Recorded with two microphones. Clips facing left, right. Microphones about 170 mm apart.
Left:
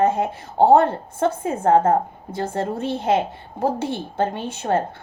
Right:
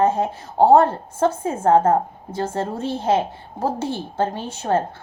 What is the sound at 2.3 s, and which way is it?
Speech, 60° left (ahead or behind).